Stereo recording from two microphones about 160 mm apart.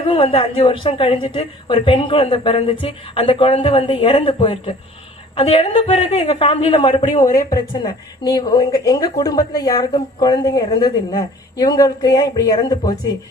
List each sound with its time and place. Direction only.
0.0 s a woman's voice: 35° left (ahead or behind)